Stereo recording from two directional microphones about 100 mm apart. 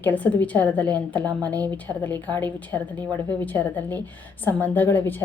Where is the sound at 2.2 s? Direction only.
15° left (ahead or behind).